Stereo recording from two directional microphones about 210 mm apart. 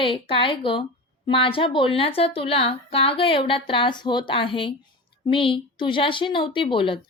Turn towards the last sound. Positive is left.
turn(degrees=25)  # may be behind; listen again after turning